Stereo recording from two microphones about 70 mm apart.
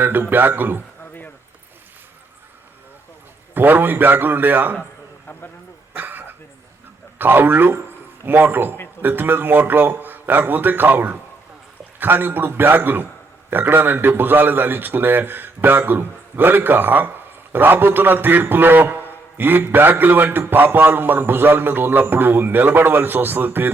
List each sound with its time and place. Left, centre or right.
0.0 s a man's voice: right
3.5 s a man's voice: right
6.0 s a sound: right
7.2 s a man's voice: right